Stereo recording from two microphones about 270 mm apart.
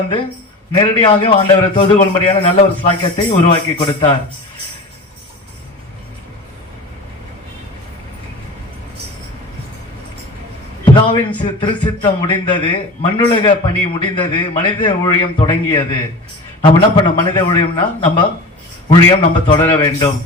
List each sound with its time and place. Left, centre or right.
0.7 s a man's voice: centre
10.8 s a sound: centre
11.4 s a man's voice: centre